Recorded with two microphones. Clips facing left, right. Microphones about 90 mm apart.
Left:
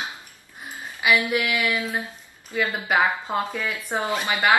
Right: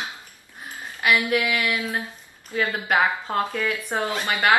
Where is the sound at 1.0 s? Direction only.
5° left (ahead or behind).